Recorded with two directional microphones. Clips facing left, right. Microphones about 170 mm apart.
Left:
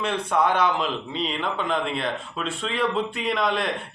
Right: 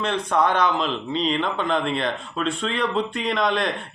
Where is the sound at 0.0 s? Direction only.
10° left (ahead or behind).